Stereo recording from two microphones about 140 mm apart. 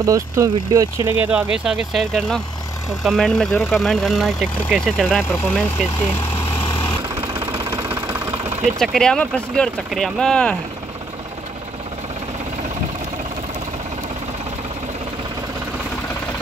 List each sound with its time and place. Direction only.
0.0 s speech: 25° right (ahead or behind); by 5.0 s centre (ahead or behind)
5.3 s speech: 10° left (ahead or behind)
7.7 s engine: 20° right (ahead or behind)
8.7 s speech: 5° left (ahead or behind)